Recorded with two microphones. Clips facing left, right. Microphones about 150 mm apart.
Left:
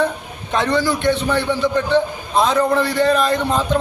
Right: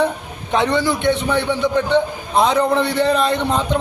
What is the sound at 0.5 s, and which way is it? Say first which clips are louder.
A man's voice: right 1 dB; 15° right (ahead or behind).